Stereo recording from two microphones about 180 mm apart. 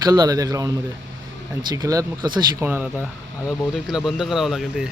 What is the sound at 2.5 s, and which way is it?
A man's voice, 10° right (ahead or behind).